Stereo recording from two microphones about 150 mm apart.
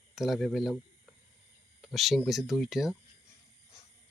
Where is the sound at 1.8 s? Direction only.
Centre (ahead or behind).